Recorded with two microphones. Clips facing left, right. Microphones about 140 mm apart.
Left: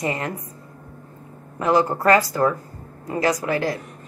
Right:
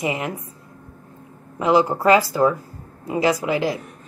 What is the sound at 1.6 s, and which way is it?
A woman's voice, 15° right (ahead or behind).